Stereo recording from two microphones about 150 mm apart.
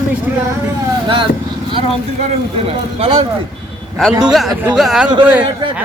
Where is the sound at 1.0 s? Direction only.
35° right (ahead or behind).